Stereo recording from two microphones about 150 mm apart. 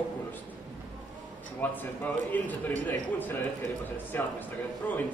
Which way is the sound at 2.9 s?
15° left (ahead or behind).